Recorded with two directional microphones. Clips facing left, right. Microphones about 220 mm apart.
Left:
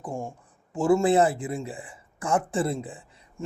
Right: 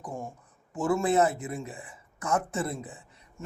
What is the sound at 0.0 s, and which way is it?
Speech, 30° left (ahead or behind).